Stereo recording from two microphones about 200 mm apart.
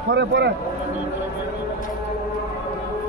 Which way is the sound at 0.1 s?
60° right (ahead or behind).